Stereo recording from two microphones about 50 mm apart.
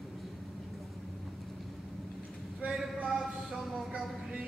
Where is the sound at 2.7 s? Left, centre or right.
Centre.